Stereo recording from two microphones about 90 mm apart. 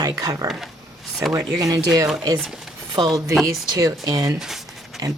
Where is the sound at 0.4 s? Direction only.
Centre (ahead or behind).